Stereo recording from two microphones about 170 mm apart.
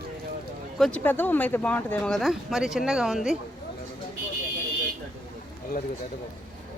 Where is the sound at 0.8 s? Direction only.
5° left (ahead or behind).